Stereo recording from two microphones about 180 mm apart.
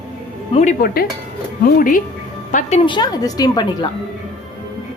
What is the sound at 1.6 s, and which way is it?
Speech, 50° left (ahead or behind).